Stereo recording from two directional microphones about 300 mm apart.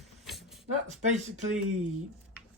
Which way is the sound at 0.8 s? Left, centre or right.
Right.